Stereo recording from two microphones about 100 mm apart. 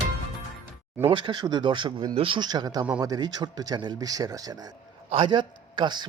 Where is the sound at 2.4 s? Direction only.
45° right (ahead or behind).